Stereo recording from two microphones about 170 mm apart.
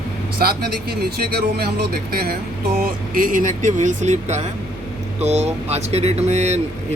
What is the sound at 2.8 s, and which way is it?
Speech, 55° right (ahead or behind).